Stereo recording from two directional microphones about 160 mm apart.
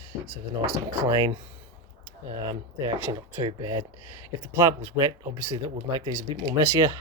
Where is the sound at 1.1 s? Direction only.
25° right (ahead or behind).